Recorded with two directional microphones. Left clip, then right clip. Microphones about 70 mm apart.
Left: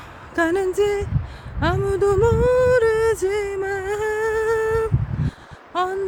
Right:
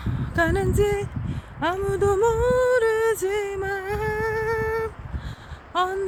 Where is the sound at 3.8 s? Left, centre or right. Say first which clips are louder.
Left 5 dB; left.